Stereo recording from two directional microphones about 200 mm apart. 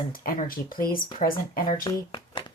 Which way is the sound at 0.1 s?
45° left (ahead or behind).